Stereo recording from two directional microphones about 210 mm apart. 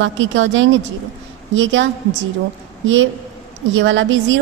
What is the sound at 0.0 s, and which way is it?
A woman's voice, 65° right (ahead or behind).